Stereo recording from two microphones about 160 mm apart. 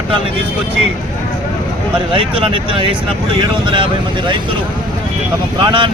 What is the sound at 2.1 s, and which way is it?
Speech, 35° right (ahead or behind).